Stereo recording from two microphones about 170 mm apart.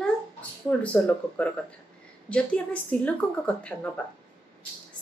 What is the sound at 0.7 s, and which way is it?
Speech, 10° left (ahead or behind).